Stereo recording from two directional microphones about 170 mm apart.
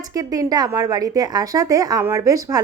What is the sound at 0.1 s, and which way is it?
A woman's voice, 20° right (ahead or behind).